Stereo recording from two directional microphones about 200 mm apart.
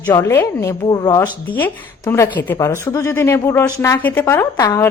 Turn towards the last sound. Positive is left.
turn(degrees=15)  # may be behind; listen again after turning